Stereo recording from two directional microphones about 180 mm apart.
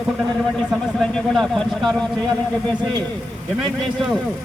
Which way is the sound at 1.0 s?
Centre (ahead or behind).